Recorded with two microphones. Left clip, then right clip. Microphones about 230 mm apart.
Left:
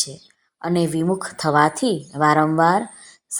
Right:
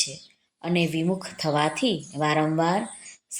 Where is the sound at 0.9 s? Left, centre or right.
Left.